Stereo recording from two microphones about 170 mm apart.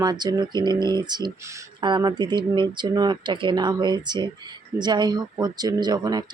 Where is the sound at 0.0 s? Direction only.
25° right (ahead or behind).